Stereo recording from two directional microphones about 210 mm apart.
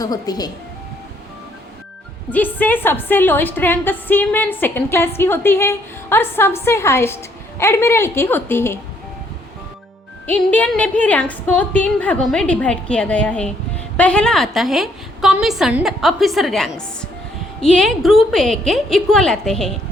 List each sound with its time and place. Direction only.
0.0 s speech: 20° left (ahead or behind)
2.3 s a woman's voice: 10° left (ahead or behind)
10.2 s a woman's voice: 5° left (ahead or behind)